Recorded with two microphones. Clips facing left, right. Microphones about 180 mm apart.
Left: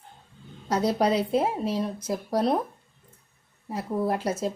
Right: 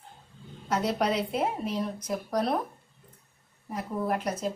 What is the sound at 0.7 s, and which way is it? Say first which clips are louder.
Speech: left 4 dB; 35° left (ahead or behind).